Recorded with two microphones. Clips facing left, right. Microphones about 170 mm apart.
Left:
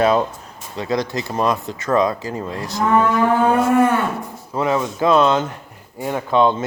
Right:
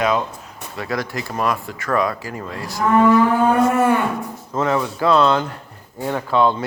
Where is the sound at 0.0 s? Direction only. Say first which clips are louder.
Left 4 dB; 30° left (ahead or behind).